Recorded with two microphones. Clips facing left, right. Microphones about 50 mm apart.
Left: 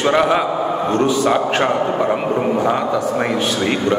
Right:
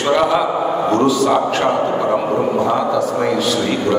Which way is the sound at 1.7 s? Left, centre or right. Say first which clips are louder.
Right 1 dB; centre.